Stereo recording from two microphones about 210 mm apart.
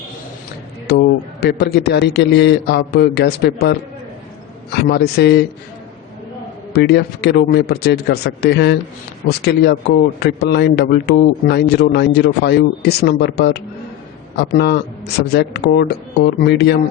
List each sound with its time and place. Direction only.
0.9 s speech: 50° left (ahead or behind)
6.7 s speech: 50° left (ahead or behind)